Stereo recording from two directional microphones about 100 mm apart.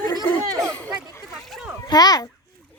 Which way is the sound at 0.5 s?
30° right (ahead or behind).